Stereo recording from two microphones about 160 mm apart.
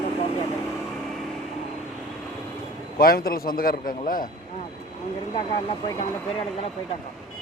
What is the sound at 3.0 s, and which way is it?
Speech, 65° left (ahead or behind).